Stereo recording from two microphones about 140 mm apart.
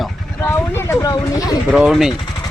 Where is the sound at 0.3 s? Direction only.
15° left (ahead or behind).